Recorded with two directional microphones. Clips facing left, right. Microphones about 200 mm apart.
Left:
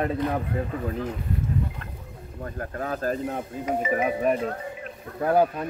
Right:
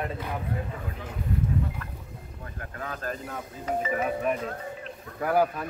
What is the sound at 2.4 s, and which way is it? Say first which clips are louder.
Speech: left 7 dB; 40° left (ahead or behind).